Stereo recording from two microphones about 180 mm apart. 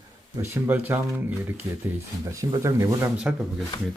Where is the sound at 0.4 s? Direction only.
10° right (ahead or behind).